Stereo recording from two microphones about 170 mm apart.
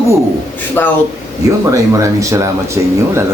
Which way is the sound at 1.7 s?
20° right (ahead or behind).